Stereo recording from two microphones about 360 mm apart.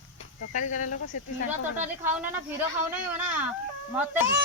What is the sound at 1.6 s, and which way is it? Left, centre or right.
A woman's voice, centre.